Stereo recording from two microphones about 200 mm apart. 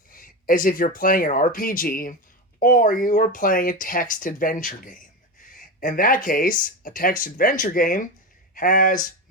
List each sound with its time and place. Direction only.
0.1 s speech: 45° left (ahead or behind)